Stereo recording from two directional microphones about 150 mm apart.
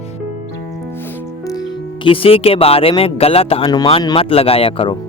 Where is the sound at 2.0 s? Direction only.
35° left (ahead or behind).